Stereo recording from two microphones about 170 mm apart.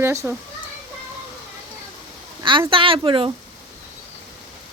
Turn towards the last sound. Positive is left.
turn(degrees=-30)  # may be behind; listen again after turning